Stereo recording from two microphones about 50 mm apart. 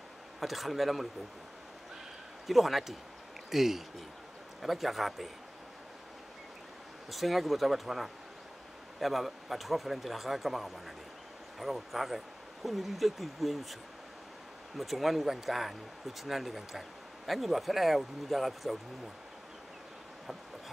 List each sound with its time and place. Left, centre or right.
0.4 s speech: centre
2.4 s speech: centre
7.1 s speech: centre
14.8 s speech: centre